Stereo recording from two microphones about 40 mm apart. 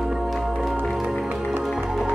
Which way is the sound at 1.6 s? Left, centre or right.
Centre.